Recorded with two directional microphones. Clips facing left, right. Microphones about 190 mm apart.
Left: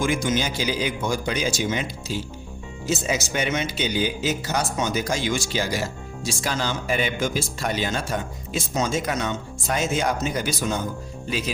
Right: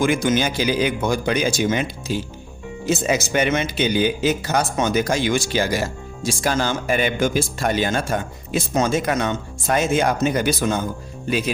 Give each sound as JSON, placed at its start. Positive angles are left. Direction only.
{"t": 0.0, "sound": "speech", "side_deg": -60}